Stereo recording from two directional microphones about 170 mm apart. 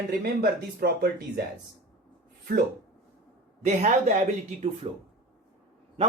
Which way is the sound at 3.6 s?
45° right (ahead or behind).